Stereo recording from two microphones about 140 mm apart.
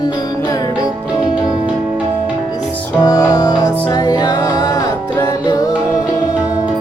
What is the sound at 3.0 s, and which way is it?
Music, 25° left (ahead or behind).